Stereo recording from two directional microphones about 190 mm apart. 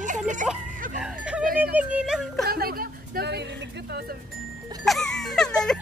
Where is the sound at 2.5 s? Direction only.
50° right (ahead or behind).